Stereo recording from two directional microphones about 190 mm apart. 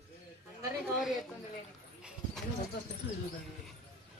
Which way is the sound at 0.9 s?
Centre (ahead or behind).